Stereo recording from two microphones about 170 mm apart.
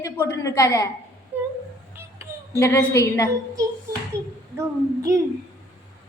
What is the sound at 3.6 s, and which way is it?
A child's voice, 20° right (ahead or behind).